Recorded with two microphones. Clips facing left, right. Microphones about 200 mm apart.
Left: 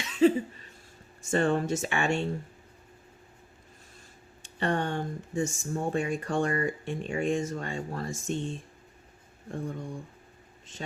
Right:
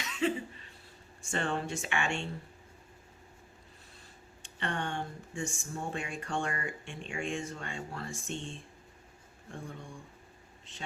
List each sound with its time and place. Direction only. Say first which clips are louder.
0.0 s a sound: left 9 dB; 35° left (ahead or behind)
1.3 s speech: left 8 dB; 40° left (ahead or behind)
4.6 s speech: left 7 dB; 40° left (ahead or behind)